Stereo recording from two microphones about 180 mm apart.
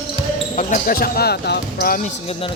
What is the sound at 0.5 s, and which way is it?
Speech, 40° left (ahead or behind).